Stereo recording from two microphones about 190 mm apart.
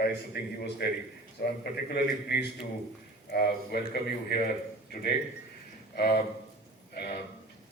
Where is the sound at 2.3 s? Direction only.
60° left (ahead or behind).